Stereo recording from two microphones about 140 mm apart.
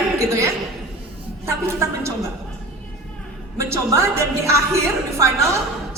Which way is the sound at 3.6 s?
20° right (ahead or behind).